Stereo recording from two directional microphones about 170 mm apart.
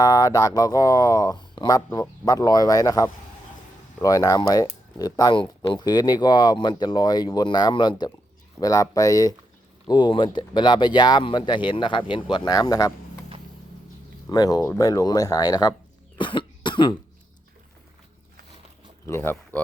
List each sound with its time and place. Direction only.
0.0 s speech: 20° left (ahead or behind)
14.3 s speech: 25° left (ahead or behind)
16.1 s cough: 30° left (ahead or behind)
19.0 s speech: 15° left (ahead or behind)